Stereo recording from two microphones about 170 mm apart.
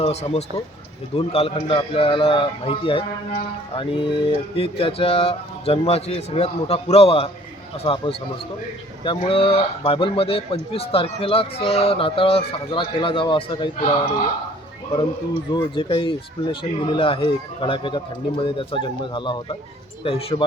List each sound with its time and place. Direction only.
0.0 s a man's voice: 35° left (ahead or behind)
9.0 s a man's voice: 30° left (ahead or behind)
15.5 s a man's voice: 30° left (ahead or behind)